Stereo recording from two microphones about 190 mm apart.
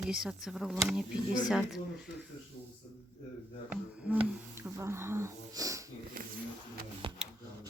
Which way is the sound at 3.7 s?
10° right (ahead or behind).